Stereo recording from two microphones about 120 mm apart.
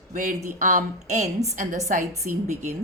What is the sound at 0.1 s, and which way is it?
A woman's voice, 90° right.